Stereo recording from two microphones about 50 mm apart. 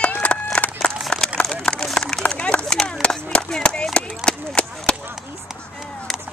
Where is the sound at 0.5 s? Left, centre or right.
Left.